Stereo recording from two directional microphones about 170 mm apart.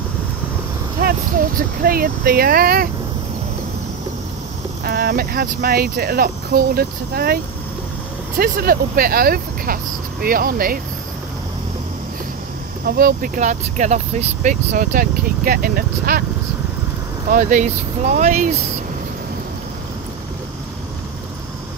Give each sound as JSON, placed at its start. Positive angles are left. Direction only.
{"t": 1.0, "sound": "speech", "side_deg": -60}
{"t": 4.8, "sound": "speech", "side_deg": -60}
{"t": 8.4, "sound": "speech", "side_deg": -60}
{"t": 12.8, "sound": "speech", "side_deg": -60}
{"t": 17.3, "sound": "speech", "side_deg": -50}